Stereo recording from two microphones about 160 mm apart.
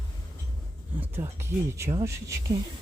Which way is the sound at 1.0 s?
15° right (ahead or behind).